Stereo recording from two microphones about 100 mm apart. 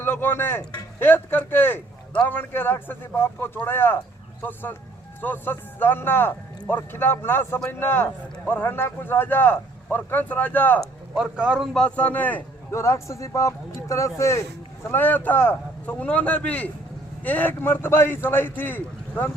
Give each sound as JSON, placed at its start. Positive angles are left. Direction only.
{"t": 0.0, "sound": "a man's voice", "side_deg": 25}
{"t": 11.1, "sound": "speech", "side_deg": -10}
{"t": 11.7, "sound": "speech", "side_deg": 10}
{"t": 12.7, "sound": "speech", "side_deg": 30}
{"t": 14.8, "sound": "a man's voice", "side_deg": 20}